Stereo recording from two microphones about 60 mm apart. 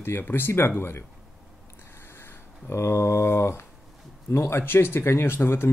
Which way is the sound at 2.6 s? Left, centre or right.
Left.